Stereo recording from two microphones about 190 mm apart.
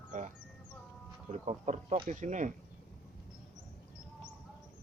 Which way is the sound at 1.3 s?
35° right (ahead or behind).